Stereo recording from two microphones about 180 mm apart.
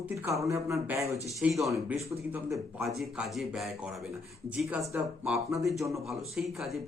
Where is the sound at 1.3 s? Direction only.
5° right (ahead or behind).